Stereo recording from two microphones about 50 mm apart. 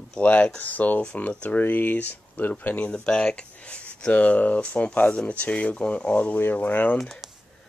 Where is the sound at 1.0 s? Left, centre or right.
Centre.